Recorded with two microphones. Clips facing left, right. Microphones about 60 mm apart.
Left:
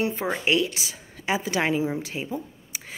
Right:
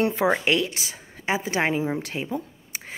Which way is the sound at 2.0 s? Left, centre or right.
Right.